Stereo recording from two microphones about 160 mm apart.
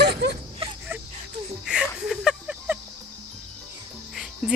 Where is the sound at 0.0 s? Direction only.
90° right.